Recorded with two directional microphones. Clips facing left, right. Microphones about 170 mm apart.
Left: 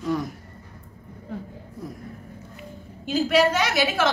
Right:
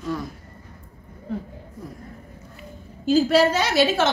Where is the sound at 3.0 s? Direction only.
30° right (ahead or behind).